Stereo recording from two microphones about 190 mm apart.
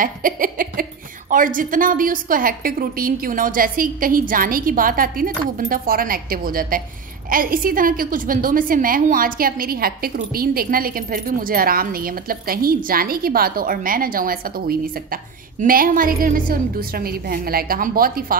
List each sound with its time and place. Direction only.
0.0 s a woman's voice: 45° right (ahead or behind)